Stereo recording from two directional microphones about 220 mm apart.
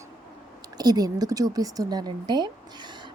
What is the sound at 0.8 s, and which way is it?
Speech, 15° right (ahead or behind).